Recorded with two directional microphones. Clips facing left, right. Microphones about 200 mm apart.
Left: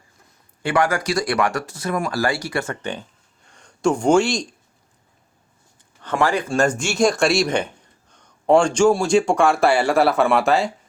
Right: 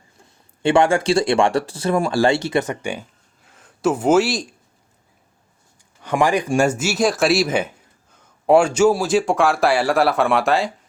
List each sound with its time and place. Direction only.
0.6 s speech: 25° right (ahead or behind)
3.4 s a sound: 5° right (ahead or behind)
6.0 s speech: 15° right (ahead or behind)